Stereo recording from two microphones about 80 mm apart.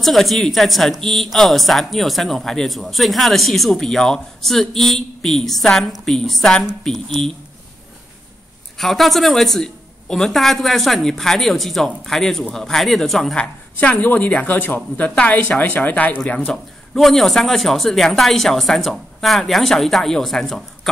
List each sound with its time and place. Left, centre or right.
0.0 s speech: centre
8.7 s speech: centre
13.4 s speech: centre